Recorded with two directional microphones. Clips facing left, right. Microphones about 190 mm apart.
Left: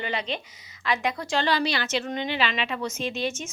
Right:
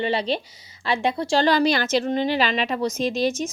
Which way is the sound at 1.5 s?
45° right (ahead or behind).